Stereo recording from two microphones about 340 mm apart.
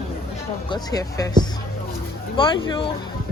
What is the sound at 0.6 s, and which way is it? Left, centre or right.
A woman's voice, centre.